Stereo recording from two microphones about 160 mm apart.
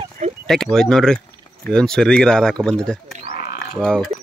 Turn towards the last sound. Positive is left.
turn(degrees=5)  # may be behind; listen again after turning